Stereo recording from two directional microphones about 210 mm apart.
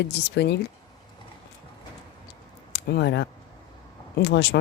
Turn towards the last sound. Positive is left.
turn(degrees=55)  # may be behind; listen again after turning